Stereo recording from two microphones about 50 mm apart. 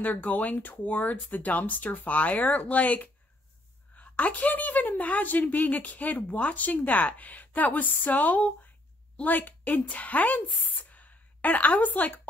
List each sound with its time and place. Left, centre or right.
0.0 s a woman's voice: left